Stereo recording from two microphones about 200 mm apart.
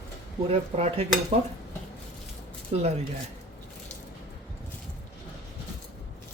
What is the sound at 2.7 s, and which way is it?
Speech, 35° right (ahead or behind).